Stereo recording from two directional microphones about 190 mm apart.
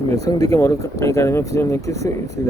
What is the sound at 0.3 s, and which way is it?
Speech, 20° left (ahead or behind).